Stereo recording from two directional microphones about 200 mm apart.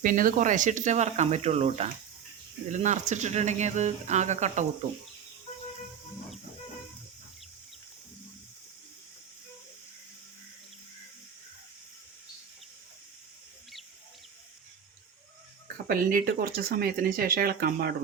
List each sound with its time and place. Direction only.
0.0 s speech: 45° right (ahead or behind)
15.6 s speech: 45° right (ahead or behind)